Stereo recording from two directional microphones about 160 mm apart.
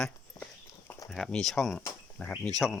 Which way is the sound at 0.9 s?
20° left (ahead or behind).